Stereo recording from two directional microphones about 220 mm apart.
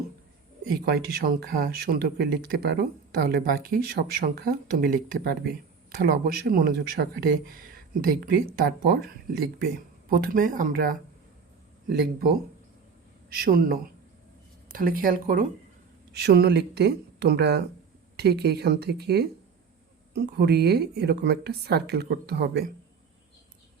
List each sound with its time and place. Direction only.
0.6 s speech: 40° right (ahead or behind)